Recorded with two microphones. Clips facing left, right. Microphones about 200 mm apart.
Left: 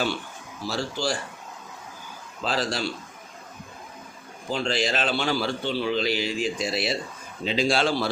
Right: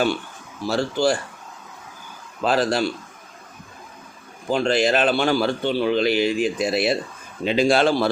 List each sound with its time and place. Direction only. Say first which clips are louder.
0.7 s speech: right 8 dB; 55° right (ahead or behind)
2.4 s speech: right 7 dB; 55° right (ahead or behind)
4.4 s a man's voice: right 7 dB; 55° right (ahead or behind)